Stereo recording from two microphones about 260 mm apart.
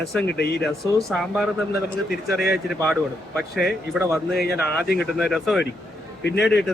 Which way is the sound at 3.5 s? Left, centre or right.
Left.